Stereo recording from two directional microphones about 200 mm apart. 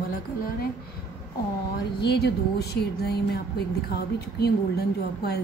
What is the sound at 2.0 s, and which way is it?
Speech, 55° left (ahead or behind).